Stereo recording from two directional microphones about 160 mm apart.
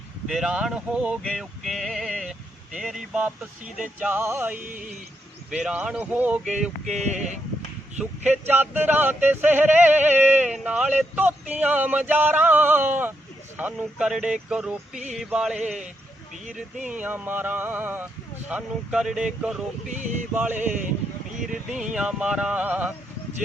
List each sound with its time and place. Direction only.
0.3 s male singing: 5° right (ahead or behind)
3.8 s yodeling: 10° right (ahead or behind)
4.5 s speech: 60° right (ahead or behind)
5.5 s male singing: 5° right (ahead or behind)
6.9 s speech: 45° right (ahead or behind)
8.3 s yodeling: 10° right (ahead or behind)
13.6 s male singing: 5° right (ahead or behind)
16.9 s yodeling: 10° right (ahead or behind)
21.4 s male singing: 5° right (ahead or behind)
21.9 s yodeling: 5° right (ahead or behind)